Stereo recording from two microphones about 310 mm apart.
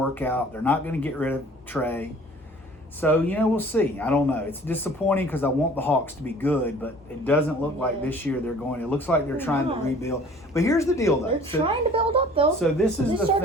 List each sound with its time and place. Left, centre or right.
0.1 s speech: centre
11.4 s a woman's voice: centre
12.5 s speech: centre